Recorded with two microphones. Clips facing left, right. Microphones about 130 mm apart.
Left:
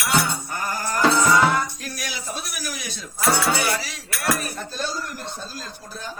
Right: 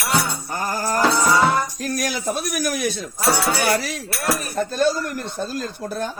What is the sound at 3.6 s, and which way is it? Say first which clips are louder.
Speech: right 5 dB; 50° right (ahead or behind).